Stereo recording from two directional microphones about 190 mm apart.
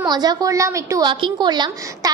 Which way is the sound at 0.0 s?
20° right (ahead or behind).